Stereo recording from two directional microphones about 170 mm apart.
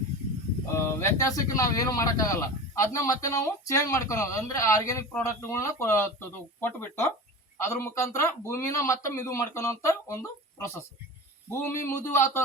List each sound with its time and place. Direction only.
0.7 s speech: 15° left (ahead or behind)